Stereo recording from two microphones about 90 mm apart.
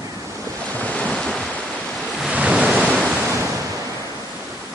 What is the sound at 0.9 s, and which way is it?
Waves, 10° left (ahead or behind).